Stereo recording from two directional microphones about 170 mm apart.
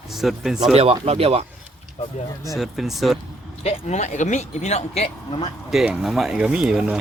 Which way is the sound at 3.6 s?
40° left (ahead or behind).